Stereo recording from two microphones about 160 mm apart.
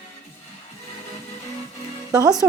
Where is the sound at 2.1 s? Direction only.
25° right (ahead or behind).